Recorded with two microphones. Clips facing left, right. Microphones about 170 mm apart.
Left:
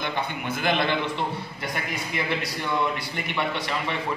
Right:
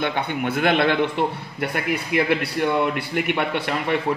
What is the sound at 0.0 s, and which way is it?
Speech, 65° right (ahead or behind).